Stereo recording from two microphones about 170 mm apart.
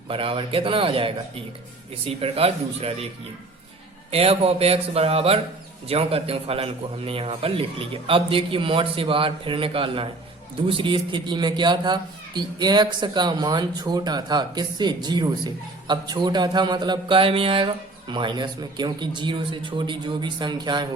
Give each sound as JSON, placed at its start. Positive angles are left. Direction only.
{"t": 0.1, "sound": "a man's voice", "side_deg": -30}
{"t": 4.1, "sound": "a man's voice", "side_deg": -35}